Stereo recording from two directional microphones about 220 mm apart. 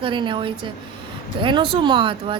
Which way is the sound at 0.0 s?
20° right (ahead or behind).